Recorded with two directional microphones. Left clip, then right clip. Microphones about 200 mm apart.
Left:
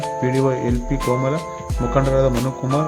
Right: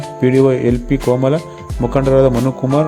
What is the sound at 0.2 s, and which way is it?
Speech, 25° right (ahead or behind).